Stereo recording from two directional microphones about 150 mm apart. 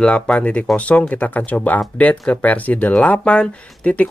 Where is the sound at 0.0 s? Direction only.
5° left (ahead or behind).